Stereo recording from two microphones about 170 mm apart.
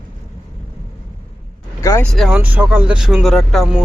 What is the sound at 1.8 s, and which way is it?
Speech, 15° left (ahead or behind).